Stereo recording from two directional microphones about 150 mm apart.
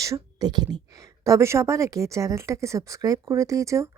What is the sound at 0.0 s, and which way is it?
A woman's voice, 25° right (ahead or behind).